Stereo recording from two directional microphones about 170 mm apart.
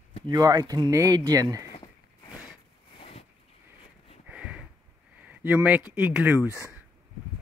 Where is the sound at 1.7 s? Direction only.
30° left (ahead or behind).